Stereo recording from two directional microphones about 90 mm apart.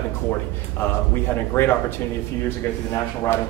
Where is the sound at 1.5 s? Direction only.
25° left (ahead or behind).